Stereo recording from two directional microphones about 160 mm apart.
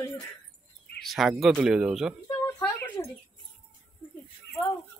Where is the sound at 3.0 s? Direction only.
20° left (ahead or behind).